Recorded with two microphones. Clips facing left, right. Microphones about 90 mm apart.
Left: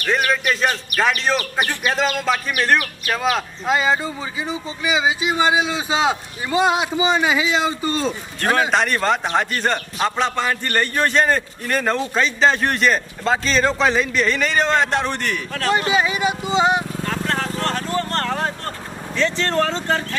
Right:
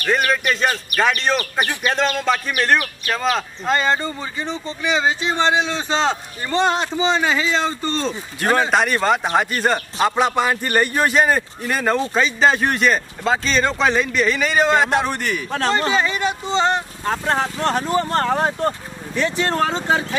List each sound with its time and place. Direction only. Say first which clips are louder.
0.0 s a man's voice: right 1 dB; centre (ahead or behind)
15.9 s speech: left 1 dB; 10° left (ahead or behind)
17.0 s speech: right 3 dB; 20° right (ahead or behind)